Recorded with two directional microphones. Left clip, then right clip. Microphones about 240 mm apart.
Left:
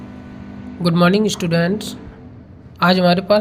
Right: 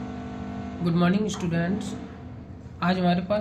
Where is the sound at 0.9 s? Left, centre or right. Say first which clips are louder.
Left 11 dB; left.